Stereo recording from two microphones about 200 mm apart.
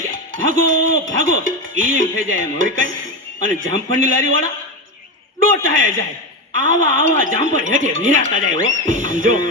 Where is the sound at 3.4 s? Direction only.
75° right (ahead or behind).